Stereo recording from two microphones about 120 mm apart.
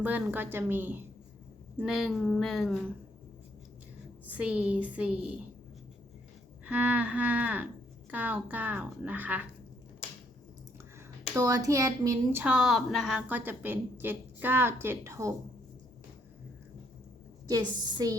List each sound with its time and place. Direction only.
0.0 s a woman's voice: 15° right (ahead or behind)
1.8 s speech: centre (ahead or behind)
4.3 s a woman's voice: 10° right (ahead or behind)
6.7 s a woman's voice: 10° right (ahead or behind)
11.3 s speech: 30° right (ahead or behind)
12.4 s a woman's voice: 10° right (ahead or behind); by 15.3 s 25° right (ahead or behind)
17.5 s speech: 30° right (ahead or behind)